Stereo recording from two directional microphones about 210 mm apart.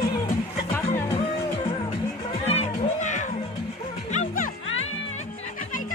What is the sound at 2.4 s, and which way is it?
Music, 35° left (ahead or behind).